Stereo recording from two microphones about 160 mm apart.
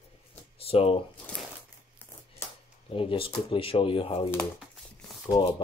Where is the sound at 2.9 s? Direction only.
35° left (ahead or behind).